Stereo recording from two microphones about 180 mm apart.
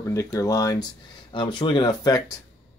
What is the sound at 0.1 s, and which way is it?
Speech, 15° left (ahead or behind).